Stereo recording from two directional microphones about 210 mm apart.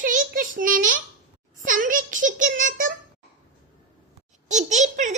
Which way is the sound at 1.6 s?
40° right (ahead or behind).